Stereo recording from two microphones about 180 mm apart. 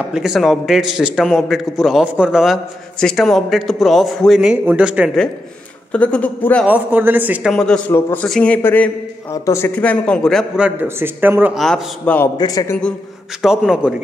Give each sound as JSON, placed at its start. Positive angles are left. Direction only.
{"t": 0.1, "sound": "a man's voice", "side_deg": -5}
{"t": 6.6, "sound": "speech", "side_deg": -10}
{"t": 7.5, "sound": "a man's voice", "side_deg": 5}
{"t": 11.6, "sound": "a man's voice", "side_deg": 5}
{"t": 12.4, "sound": "a man's voice", "side_deg": 20}
{"t": 13.4, "sound": "a man's voice", "side_deg": -5}